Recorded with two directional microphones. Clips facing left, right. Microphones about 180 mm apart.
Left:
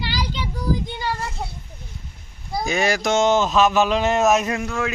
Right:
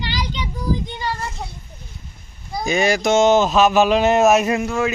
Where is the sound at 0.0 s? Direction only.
10° left (ahead or behind).